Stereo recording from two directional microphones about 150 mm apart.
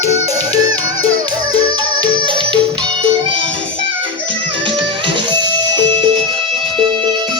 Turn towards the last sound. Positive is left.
turn(degrees=-30)  # may be behind; listen again after turning